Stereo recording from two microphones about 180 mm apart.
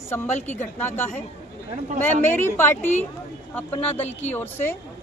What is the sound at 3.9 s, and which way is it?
Speech, 35° left (ahead or behind).